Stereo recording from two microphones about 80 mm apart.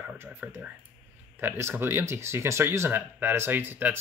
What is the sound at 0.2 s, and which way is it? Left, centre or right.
Speech, centre.